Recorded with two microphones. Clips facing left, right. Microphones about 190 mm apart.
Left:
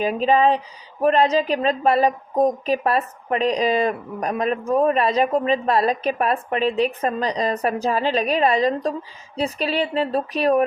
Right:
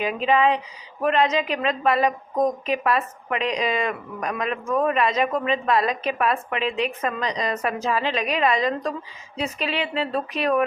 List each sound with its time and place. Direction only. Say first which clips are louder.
0.0 s a woman's voice: left 3 dB; 35° left (ahead or behind)